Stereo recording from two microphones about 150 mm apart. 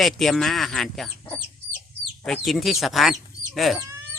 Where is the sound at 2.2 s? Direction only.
Centre (ahead or behind).